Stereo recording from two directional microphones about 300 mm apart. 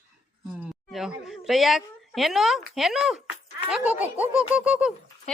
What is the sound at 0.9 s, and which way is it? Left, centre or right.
Speech, centre.